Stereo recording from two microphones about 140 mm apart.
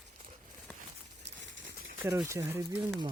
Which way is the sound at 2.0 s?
20° right (ahead or behind).